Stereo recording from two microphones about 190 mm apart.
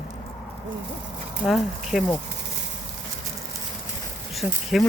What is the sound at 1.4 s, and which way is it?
Speech, centre (ahead or behind).